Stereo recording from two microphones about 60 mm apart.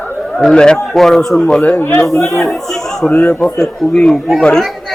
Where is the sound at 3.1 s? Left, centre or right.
Left.